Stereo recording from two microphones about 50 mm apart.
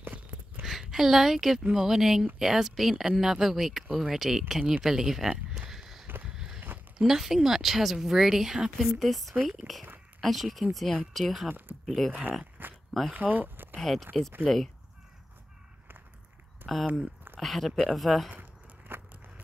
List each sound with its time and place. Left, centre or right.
0.7 s a woman's voice: centre
5.7 s walk: centre
7.0 s speech: centre
9.0 s speech: centre
12.1 s speech: right
12.6 s oink: right
13.1 s speech: right
13.7 s speech: centre
16.6 s speech: centre
18.3 s biting: right